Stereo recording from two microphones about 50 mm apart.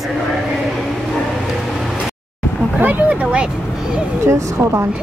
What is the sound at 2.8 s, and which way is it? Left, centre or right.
Speech, right.